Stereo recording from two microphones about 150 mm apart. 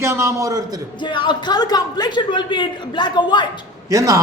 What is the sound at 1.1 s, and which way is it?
A man's voice, 30° left (ahead or behind).